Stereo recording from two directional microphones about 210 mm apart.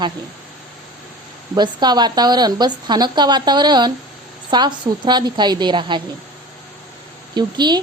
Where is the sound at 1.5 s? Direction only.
20° right (ahead or behind).